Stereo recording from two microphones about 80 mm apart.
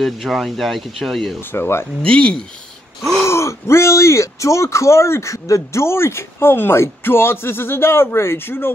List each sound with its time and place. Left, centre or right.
0.0 s speech: centre
1.4 s speech: left
2.0 s speech: centre
3.3 s speech: left